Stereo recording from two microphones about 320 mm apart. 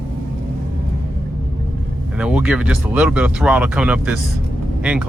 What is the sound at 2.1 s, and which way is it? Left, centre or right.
Speech, centre.